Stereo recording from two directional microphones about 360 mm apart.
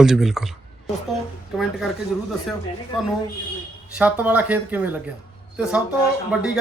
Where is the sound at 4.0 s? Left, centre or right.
Centre.